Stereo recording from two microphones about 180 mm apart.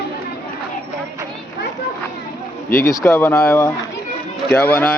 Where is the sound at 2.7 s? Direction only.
15° left (ahead or behind).